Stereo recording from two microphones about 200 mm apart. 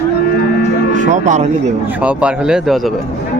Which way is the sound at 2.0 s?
5° right (ahead or behind).